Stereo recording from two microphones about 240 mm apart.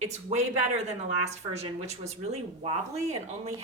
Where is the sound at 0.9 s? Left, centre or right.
Right.